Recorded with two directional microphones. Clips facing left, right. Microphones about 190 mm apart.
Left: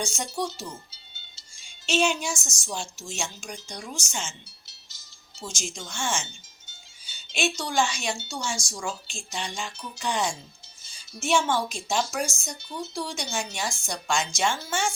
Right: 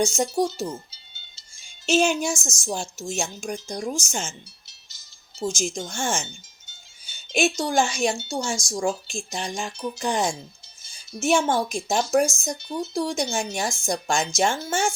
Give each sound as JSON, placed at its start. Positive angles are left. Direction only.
{"t": 0.0, "sound": "a woman's voice", "side_deg": -45}
{"t": 1.9, "sound": "a woman's voice", "side_deg": -45}
{"t": 5.4, "sound": "a woman's voice", "side_deg": -45}
{"t": 7.3, "sound": "a woman's voice", "side_deg": -45}